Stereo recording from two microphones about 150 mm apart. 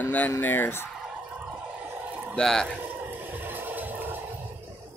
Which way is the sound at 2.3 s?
5° left (ahead or behind).